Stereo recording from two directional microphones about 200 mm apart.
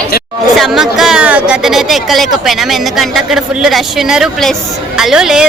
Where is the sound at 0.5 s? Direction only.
Centre (ahead or behind).